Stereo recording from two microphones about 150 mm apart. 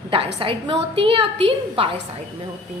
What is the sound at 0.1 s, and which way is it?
A woman's voice, 35° right (ahead or behind).